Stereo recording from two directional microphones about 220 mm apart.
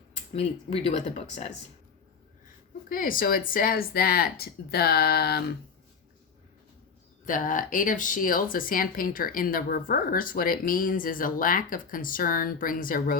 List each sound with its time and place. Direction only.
0.3 s speech: 25° left (ahead or behind)
2.9 s speech: 40° left (ahead or behind)
7.3 s speech: 35° left (ahead or behind)